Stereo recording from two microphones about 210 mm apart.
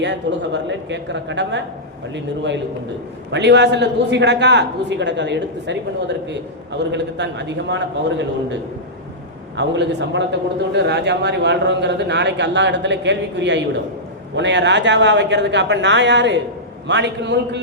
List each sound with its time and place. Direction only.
0.0 s speech: 55° right (ahead or behind)
9.6 s speech: 55° right (ahead or behind)